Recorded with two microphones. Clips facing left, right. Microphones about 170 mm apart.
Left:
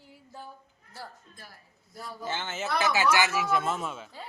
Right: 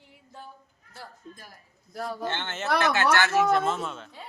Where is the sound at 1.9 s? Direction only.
85° right.